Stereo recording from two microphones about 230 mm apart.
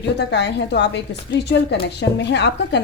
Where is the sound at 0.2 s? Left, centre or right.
Left.